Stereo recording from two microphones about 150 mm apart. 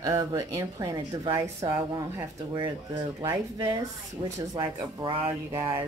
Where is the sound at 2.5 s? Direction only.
30° right (ahead or behind).